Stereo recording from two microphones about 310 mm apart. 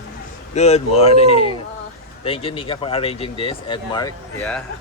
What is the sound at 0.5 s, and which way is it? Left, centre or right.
Speech, left.